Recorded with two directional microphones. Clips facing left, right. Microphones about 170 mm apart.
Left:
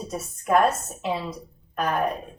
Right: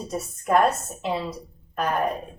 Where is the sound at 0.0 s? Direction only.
Centre (ahead or behind).